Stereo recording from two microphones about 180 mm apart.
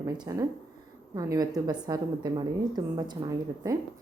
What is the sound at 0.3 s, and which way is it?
A woman's voice, 15° right (ahead or behind).